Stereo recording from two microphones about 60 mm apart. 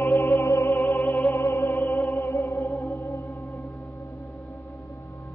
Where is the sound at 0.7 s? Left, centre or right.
Left.